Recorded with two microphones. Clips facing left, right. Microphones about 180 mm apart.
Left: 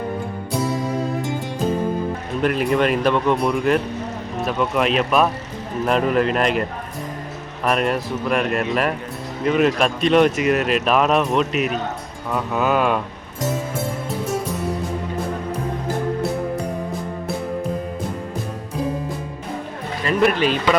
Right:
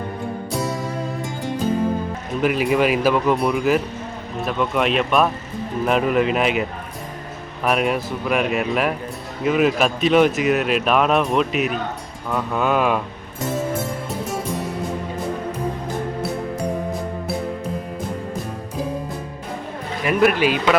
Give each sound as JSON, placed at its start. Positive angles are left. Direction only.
{"t": 2.4, "sound": "speech", "side_deg": -5}
{"t": 20.1, "sound": "speech", "side_deg": -5}